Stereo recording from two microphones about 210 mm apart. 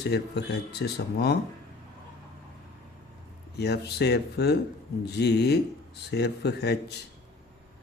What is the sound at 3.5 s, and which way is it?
Speech, 50° left (ahead or behind).